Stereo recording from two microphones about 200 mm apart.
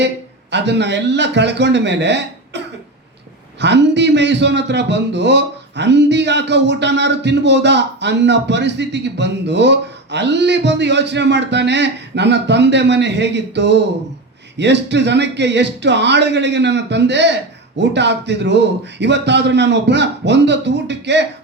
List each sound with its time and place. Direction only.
0.5 s speech: 60° right (ahead or behind)
3.6 s speech: 60° right (ahead or behind)